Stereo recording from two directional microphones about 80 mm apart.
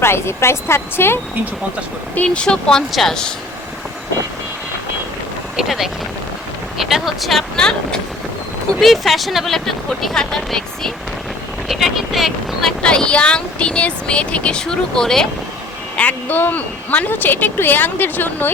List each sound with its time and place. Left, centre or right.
0.0 s speech: left
2.1 s speech: centre
5.5 s speech: centre
12.8 s speech: centre
16.0 s a woman's voice: left